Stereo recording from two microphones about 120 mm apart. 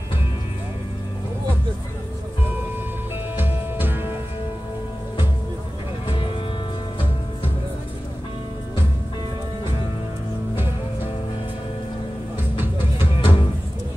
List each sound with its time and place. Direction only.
3.3 s music: 15° right (ahead or behind)
12.5 s music: 15° right (ahead or behind)